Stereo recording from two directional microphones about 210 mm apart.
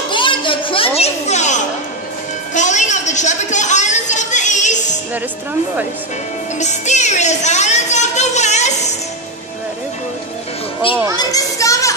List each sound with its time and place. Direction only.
0.1 s children playing: 25° left (ahead or behind)
2.5 s a sound: 35° left (ahead or behind)
6.6 s music: 35° left (ahead or behind)
11.1 s children playing: 15° left (ahead or behind)